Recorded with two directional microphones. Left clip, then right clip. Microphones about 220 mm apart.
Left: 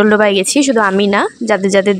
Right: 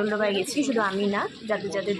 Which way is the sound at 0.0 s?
45° left (ahead or behind).